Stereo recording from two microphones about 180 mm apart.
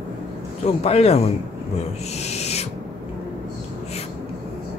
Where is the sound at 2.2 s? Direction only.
35° left (ahead or behind).